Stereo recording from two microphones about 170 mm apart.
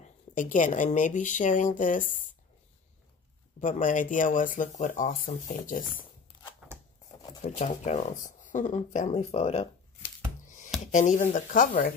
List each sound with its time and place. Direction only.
0.0 s speech: 50° left (ahead or behind)
3.6 s speech: 50° left (ahead or behind)
7.4 s speech: 45° left (ahead or behind)